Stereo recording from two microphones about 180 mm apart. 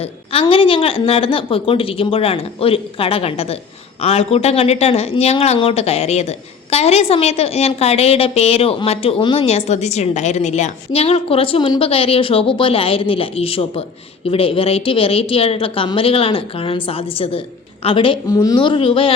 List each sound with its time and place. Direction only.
0.0 s a woman's voice: 30° left (ahead or behind)